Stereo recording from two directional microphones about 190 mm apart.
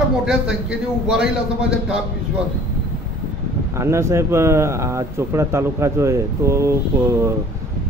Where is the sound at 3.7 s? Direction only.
15° right (ahead or behind).